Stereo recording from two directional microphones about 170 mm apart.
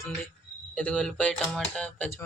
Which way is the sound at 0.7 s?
5° left (ahead or behind).